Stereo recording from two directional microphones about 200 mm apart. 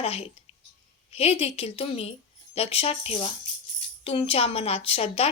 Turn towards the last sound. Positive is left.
turn(degrees=30)  # may be behind; listen again after turning